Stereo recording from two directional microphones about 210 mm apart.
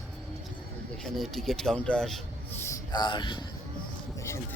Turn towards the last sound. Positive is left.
turn(degrees=20)  # may be behind; listen again after turning